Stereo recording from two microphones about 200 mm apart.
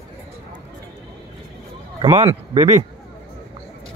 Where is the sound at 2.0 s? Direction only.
25° right (ahead or behind).